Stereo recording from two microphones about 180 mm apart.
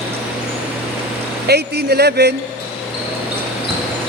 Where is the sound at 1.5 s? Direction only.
65° right (ahead or behind).